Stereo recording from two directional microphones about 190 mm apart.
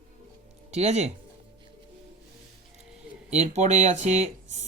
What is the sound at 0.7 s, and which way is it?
Speech, 35° right (ahead or behind).